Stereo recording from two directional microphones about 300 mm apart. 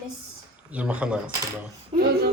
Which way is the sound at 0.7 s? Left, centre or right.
Centre.